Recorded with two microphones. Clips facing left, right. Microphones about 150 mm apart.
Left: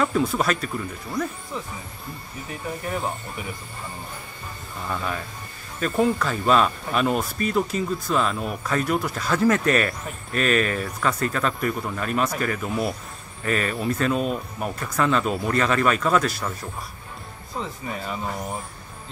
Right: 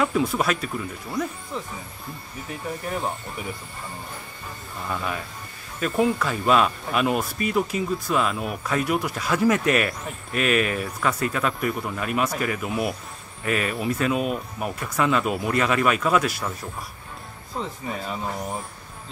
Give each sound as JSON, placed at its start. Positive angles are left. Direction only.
{"t": 0.0, "sound": "speech", "side_deg": -5}
{"t": 4.8, "sound": "speech", "side_deg": -5}
{"t": 17.6, "sound": "speech", "side_deg": 0}